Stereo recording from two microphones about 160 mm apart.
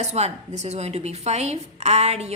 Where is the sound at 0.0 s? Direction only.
45° right (ahead or behind).